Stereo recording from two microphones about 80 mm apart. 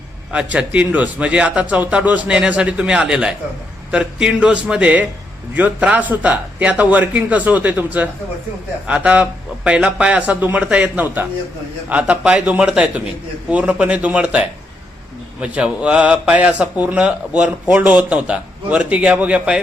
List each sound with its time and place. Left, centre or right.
0.3 s speech: centre